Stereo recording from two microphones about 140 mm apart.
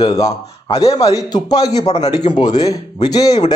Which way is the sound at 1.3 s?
30° left (ahead or behind).